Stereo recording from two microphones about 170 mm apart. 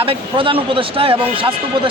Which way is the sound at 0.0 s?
30° right (ahead or behind).